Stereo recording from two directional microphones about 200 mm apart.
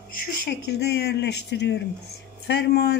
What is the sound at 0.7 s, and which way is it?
Speech, 55° left (ahead or behind).